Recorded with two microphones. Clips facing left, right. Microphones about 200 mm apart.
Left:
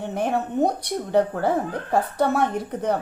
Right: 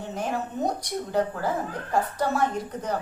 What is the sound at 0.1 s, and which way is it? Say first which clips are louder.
A woman's voice: left 5 dB; 60° left (ahead or behind).